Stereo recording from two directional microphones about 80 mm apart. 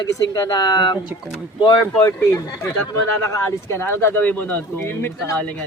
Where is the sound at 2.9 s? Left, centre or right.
Left.